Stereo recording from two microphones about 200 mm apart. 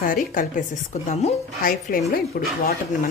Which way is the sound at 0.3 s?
40° left (ahead or behind).